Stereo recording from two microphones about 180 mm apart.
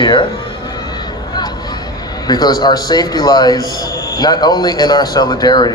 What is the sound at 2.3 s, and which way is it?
A man's voice, 20° left (ahead or behind).